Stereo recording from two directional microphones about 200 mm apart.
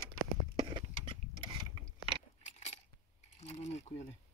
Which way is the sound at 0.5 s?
25° right (ahead or behind).